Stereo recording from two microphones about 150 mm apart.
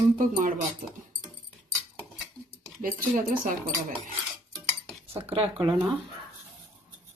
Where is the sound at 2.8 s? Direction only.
65° right (ahead or behind).